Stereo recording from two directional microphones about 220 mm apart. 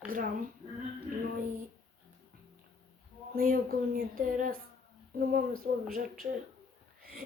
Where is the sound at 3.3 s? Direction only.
40° right (ahead or behind).